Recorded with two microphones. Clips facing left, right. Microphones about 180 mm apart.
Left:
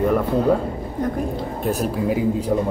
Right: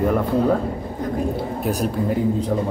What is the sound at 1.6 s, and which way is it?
Speech, 5° left (ahead or behind).